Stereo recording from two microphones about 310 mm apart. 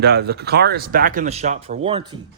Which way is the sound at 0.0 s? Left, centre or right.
Right.